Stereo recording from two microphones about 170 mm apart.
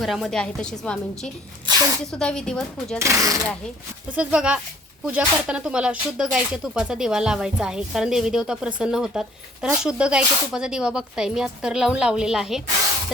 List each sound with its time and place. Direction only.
0.0 s speech: centre (ahead or behind)
3.0 s speech: 20° right (ahead or behind)
4.1 s speech: 5° right (ahead or behind)